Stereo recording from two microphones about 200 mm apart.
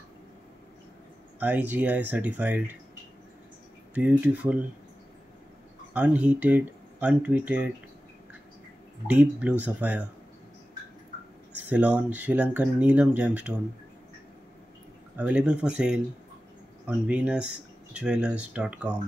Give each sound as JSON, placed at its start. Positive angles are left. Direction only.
{"t": 1.4, "sound": "speech", "side_deg": -10}
{"t": 3.9, "sound": "speech", "side_deg": -10}
{"t": 5.9, "sound": "speech", "side_deg": -5}
{"t": 9.0, "sound": "speech", "side_deg": -5}
{"t": 11.7, "sound": "speech", "side_deg": -5}
{"t": 15.1, "sound": "speech", "side_deg": -5}